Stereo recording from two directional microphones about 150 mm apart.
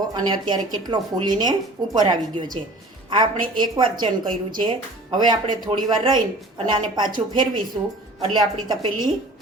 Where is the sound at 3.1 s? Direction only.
30° right (ahead or behind).